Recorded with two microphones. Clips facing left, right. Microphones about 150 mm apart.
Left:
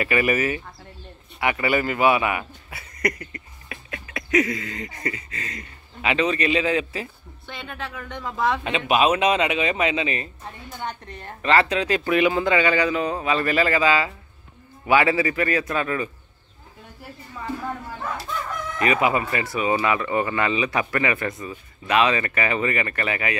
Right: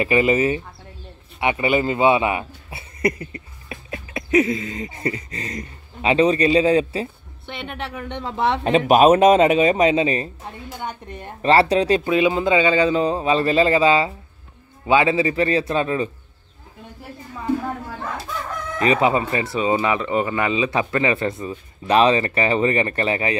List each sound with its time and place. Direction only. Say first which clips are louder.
0.0 s speech: right 4 dB; 25° right (ahead or behind)
8.7 s speech: right 9 dB; 40° right (ahead or behind)
10.7 s a woman's voice: right 1 dB; 15° right (ahead or behind)
11.4 s speech: right 5 dB; 35° right (ahead or behind)
12.0 s speech: right 2 dB; 20° right (ahead or behind)
18.8 s speech: right 3 dB; 30° right (ahead or behind)